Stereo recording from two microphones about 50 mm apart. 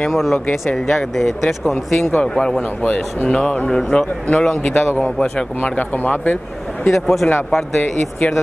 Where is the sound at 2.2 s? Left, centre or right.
Centre.